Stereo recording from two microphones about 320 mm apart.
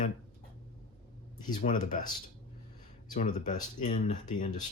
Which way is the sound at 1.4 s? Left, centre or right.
Left.